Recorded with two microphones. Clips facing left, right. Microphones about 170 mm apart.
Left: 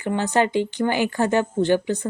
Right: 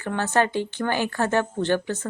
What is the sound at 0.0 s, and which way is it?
Speech, 15° left (ahead or behind).